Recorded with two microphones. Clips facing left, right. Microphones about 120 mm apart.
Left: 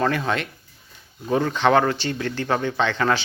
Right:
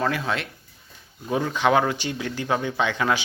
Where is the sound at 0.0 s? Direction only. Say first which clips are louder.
Left 3 dB; centre (ahead or behind).